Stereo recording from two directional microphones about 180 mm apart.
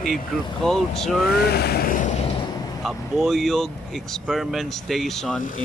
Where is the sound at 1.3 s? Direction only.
60° left (ahead or behind).